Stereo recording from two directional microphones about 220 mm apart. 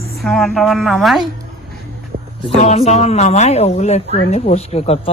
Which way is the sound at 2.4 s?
30° left (ahead or behind).